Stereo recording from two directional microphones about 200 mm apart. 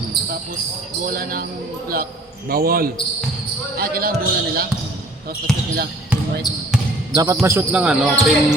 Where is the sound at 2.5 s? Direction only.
50° right (ahead or behind).